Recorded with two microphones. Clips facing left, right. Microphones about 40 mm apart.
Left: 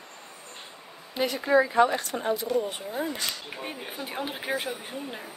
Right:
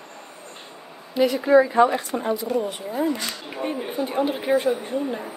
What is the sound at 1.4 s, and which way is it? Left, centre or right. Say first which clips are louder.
Speech: right 4 dB; right.